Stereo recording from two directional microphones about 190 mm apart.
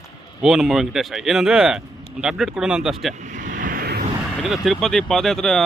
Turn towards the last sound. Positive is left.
turn(degrees=0)  # may be behind; listen again after turning